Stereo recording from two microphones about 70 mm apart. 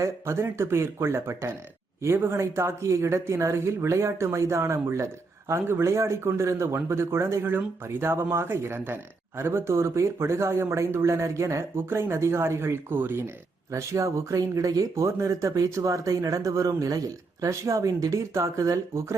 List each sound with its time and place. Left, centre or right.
0.0 s speech: right
13.7 s speech: right